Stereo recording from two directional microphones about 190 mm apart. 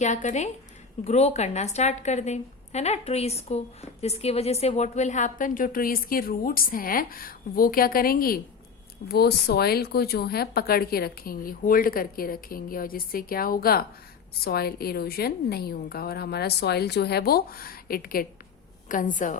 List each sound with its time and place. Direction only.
0.0 s a woman's voice: 40° left (ahead or behind)